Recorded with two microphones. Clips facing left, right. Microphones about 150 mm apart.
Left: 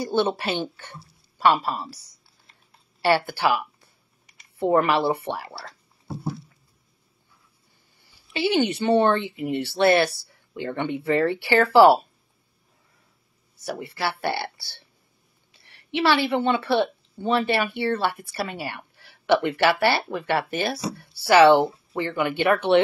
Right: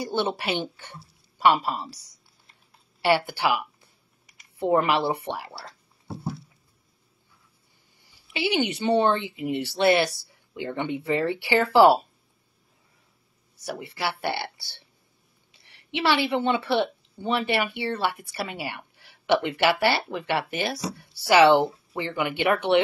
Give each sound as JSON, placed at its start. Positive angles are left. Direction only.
{"t": 0.0, "sound": "speech", "side_deg": -15}
{"t": 4.6, "sound": "speech", "side_deg": -15}
{"t": 8.0, "sound": "a woman's voice", "side_deg": -15}
{"t": 13.9, "sound": "a woman's voice", "side_deg": -15}
{"t": 20.2, "sound": "speech", "side_deg": 45}
{"t": 20.7, "sound": "speech", "side_deg": -15}